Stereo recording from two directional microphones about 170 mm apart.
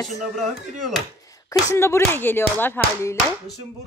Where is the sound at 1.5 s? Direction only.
15° left (ahead or behind).